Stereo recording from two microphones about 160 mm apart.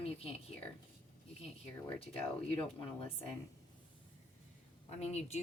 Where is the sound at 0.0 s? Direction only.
40° left (ahead or behind).